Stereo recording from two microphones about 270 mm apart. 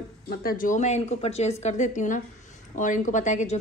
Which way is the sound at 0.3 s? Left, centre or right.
Left.